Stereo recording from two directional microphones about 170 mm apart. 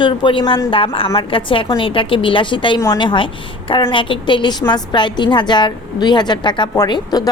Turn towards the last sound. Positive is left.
turn(degrees=25)  # may be behind; listen again after turning